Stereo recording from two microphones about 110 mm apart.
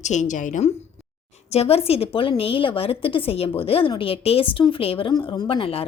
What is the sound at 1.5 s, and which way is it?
Speech, 65° left (ahead or behind).